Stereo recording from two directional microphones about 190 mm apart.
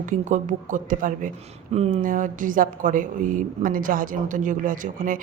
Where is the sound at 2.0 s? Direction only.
45° right (ahead or behind).